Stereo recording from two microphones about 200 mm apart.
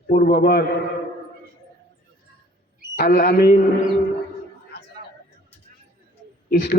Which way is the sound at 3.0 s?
50° left (ahead or behind).